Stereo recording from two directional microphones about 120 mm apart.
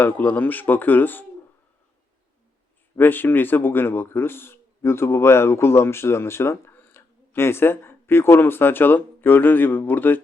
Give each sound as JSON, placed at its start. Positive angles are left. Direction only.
{"t": 0.0, "sound": "speech", "side_deg": 15}
{"t": 2.9, "sound": "speech", "side_deg": 15}